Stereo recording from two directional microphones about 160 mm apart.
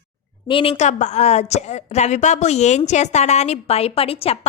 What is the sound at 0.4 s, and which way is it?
A woman's voice, 35° left (ahead or behind).